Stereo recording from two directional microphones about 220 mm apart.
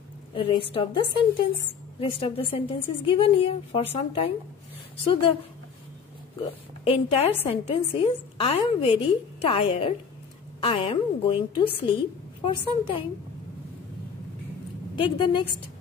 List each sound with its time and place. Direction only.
0.3 s a woman's voice: 25° left (ahead or behind)
6.4 s a woman's voice: 25° left (ahead or behind)
15.0 s a woman's voice: 20° left (ahead or behind)